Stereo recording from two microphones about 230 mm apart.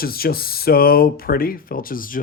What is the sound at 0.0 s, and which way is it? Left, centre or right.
Speech, left.